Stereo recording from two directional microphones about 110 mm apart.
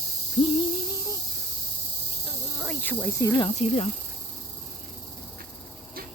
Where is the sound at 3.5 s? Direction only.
80° left.